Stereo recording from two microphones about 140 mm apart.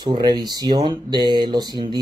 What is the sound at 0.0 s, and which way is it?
Speech, 30° right (ahead or behind).